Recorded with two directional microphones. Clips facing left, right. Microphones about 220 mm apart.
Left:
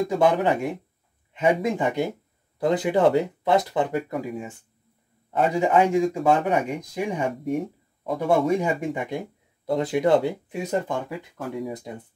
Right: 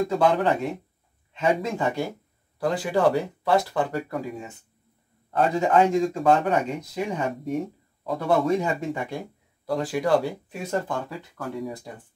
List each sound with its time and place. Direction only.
0.1 s speech: 15° left (ahead or behind)